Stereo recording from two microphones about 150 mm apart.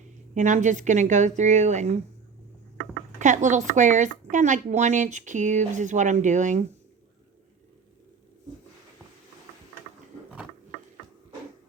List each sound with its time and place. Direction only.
0.3 s speech: 55° right (ahead or behind)
3.2 s a woman's voice: 55° right (ahead or behind)